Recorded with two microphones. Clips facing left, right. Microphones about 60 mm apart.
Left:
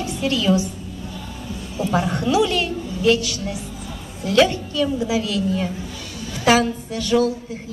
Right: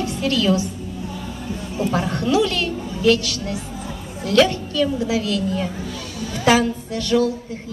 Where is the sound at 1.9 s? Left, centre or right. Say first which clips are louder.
Left 1 dB; centre.